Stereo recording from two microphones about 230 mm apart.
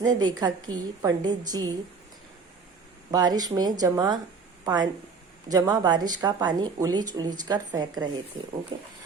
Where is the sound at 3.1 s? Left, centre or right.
Centre.